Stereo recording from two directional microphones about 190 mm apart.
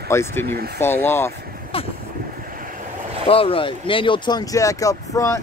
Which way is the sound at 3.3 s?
30° left (ahead or behind).